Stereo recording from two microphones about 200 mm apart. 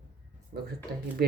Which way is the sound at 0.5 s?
40° right (ahead or behind).